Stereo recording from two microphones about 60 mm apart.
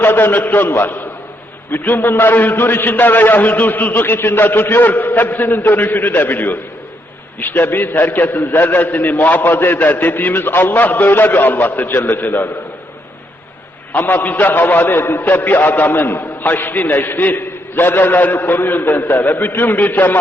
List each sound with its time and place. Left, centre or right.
0.0 s a man's voice: left
13.9 s a man's voice: left